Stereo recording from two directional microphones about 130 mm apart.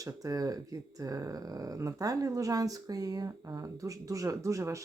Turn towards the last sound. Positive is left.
turn(degrees=-25)  # may be behind; listen again after turning